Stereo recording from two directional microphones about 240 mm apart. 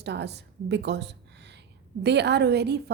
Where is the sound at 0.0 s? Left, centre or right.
Right.